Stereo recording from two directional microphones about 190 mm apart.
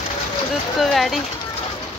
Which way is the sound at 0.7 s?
Centre (ahead or behind).